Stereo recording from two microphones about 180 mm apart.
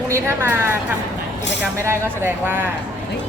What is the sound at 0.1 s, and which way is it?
Speech, 15° right (ahead or behind).